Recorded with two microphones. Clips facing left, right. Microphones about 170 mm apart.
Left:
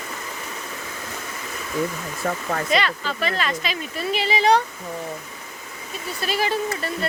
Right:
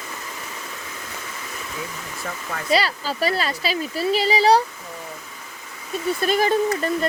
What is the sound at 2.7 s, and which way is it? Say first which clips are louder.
Speech: right 4 dB; 35° right (ahead or behind).